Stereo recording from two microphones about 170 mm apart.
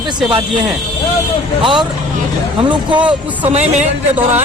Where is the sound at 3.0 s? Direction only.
10° right (ahead or behind).